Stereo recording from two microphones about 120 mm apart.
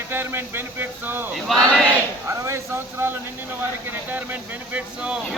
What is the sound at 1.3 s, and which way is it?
Choir, centre (ahead or behind).